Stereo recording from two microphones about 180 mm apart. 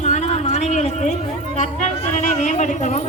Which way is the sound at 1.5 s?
40° left (ahead or behind).